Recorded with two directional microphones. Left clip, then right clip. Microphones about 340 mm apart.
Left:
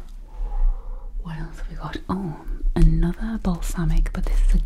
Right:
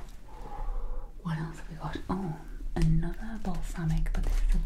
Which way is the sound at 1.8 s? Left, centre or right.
Left.